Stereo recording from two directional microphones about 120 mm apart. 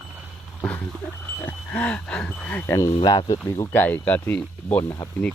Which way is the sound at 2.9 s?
40° left (ahead or behind).